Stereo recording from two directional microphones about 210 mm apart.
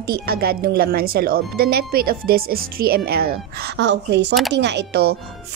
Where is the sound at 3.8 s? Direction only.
55° right (ahead or behind).